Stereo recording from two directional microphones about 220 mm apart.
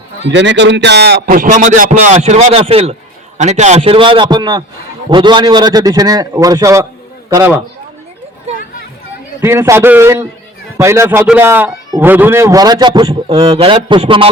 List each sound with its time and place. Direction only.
0.3 s a man's voice: 55° right (ahead or behind); by 7.6 s 10° right (ahead or behind)
9.4 s a man's voice: 10° right (ahead or behind)